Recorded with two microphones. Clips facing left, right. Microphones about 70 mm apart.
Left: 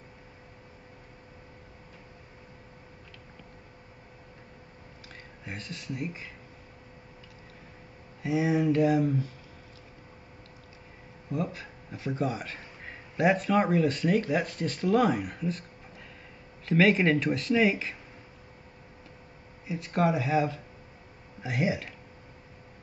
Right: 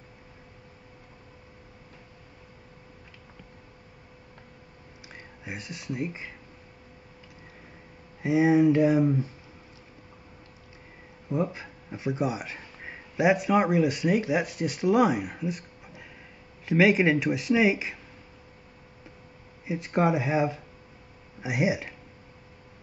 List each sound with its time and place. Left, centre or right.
5.1 s speech: centre
8.2 s speech: right
11.3 s a man's voice: right
19.6 s speech: right